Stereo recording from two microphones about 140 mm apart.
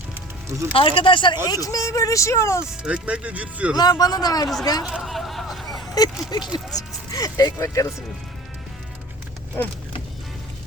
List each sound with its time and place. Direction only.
0.7 s speech: 40° left (ahead or behind)
1.5 s speech: 25° left (ahead or behind)
2.6 s speech: 5° right (ahead or behind)
3.8 s speech: 25° left (ahead or behind)
4.9 s a sound: 5° right (ahead or behind)
5.9 s speech: 30° left (ahead or behind)